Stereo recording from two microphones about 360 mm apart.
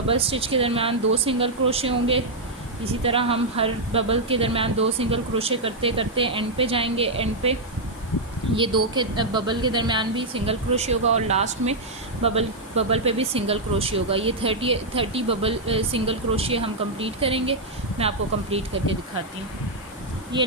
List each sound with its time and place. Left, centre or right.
0.1 s speech: centre
8.5 s speech: centre